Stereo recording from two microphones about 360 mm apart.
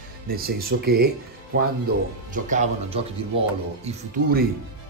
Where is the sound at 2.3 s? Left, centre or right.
Centre.